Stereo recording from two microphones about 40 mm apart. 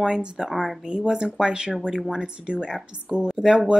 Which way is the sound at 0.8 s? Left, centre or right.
Right.